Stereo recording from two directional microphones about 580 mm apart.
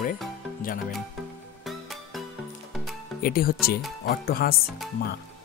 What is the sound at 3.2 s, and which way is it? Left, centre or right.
Speech, centre.